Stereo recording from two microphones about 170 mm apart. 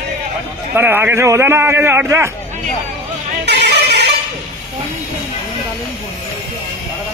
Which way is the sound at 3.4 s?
85° right.